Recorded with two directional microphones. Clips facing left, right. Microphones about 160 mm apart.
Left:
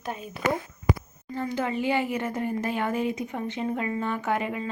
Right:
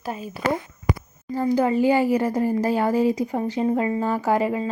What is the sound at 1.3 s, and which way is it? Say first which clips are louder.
Speech: right 8 dB; 35° right (ahead or behind).